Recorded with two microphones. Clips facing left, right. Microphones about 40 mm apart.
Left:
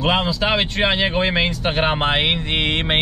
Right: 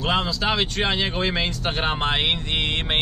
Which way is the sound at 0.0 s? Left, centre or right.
Centre.